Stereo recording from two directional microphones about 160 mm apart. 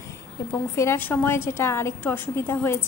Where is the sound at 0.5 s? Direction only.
15° left (ahead or behind).